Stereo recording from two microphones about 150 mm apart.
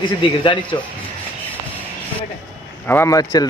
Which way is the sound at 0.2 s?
35° left (ahead or behind).